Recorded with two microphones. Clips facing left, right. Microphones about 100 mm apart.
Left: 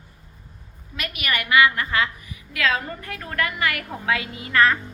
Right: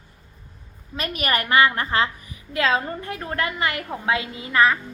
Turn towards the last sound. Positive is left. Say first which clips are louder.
# even
turn(degrees=-20)  # may be behind; listen again after turning